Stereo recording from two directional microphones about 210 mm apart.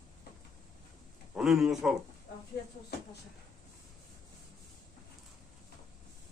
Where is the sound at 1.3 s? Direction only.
Centre (ahead or behind).